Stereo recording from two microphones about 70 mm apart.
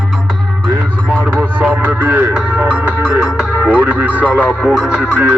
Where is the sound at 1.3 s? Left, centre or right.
Right.